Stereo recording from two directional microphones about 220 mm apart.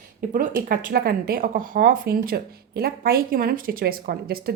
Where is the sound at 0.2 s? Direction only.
40° right (ahead or behind).